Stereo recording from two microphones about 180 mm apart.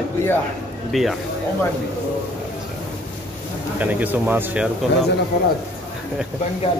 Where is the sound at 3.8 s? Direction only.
10° right (ahead or behind).